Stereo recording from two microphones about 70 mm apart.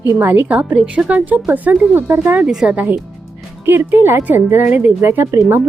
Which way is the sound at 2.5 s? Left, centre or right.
Centre.